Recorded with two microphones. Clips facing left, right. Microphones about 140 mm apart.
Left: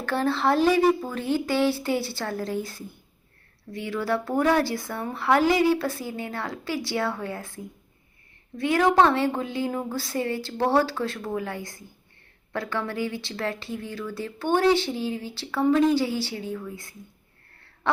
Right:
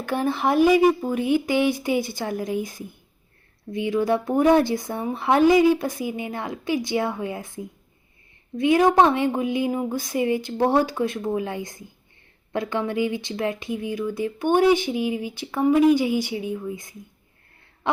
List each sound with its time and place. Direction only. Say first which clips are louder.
0.0 s speech: right 1 dB; 15° right (ahead or behind)